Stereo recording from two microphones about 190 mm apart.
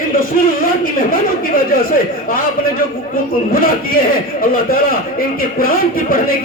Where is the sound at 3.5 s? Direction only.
50° left (ahead or behind).